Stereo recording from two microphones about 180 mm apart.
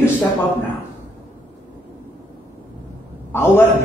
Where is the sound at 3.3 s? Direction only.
15° left (ahead or behind).